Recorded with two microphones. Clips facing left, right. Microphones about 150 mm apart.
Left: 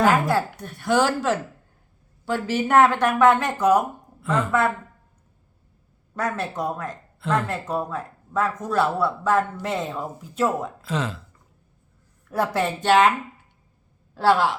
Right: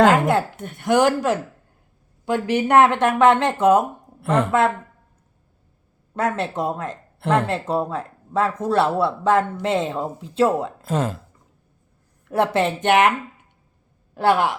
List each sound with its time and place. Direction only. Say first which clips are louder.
0.3 s speech: right 3 dB; 20° right (ahead or behind)
4.2 s a woman's voice: right 4 dB; 65° right (ahead or behind)
6.1 s speech: right 4 dB; 25° right (ahead or behind)
7.2 s speech: right 4 dB; 65° right (ahead or behind)
7.4 s speech: right 4 dB; 25° right (ahead or behind)
10.8 s speech: right 4 dB; 45° right (ahead or behind)
12.3 s speech: right 4 dB; 25° right (ahead or behind)